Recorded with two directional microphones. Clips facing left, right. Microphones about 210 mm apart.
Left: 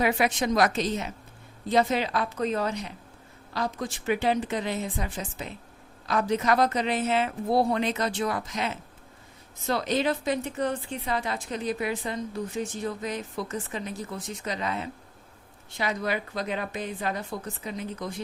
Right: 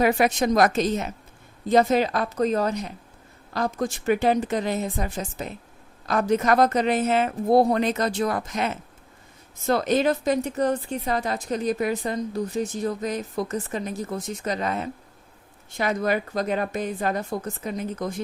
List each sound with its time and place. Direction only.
0.0 s speech: 40° right (ahead or behind)